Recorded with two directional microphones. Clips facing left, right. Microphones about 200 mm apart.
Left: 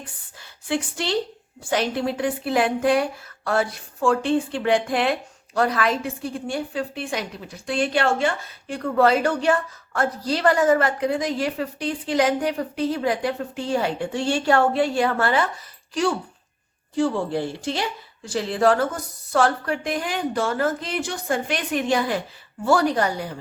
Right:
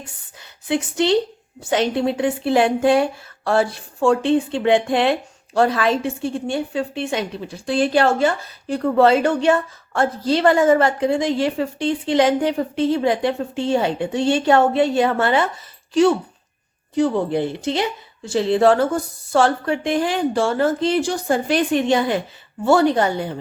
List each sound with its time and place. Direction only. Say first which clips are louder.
0.7 s a woman's voice: right 6 dB; 20° right (ahead or behind)